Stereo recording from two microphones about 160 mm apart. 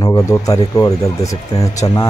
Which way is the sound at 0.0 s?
20° left (ahead or behind).